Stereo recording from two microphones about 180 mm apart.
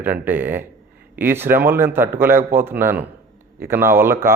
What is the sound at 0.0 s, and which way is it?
A man's voice, 10° right (ahead or behind).